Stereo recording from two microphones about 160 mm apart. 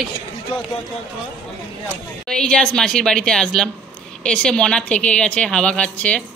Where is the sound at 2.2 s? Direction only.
5° left (ahead or behind).